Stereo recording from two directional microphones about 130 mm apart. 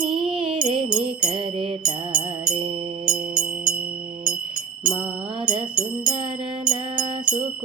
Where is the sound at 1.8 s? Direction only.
35° right (ahead or behind).